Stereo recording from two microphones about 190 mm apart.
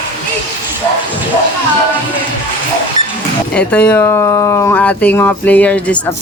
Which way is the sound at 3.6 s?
10° left (ahead or behind).